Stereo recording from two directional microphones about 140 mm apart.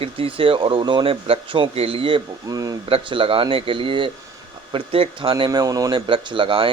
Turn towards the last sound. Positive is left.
turn(degrees=-40)  # may be behind; listen again after turning